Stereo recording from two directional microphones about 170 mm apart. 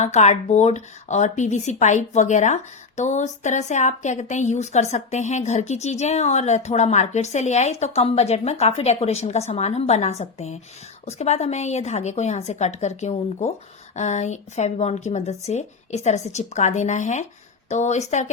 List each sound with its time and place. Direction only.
0.0 s speech: 40° left (ahead or behind)